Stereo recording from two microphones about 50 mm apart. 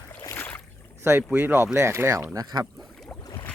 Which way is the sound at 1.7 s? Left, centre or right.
Right.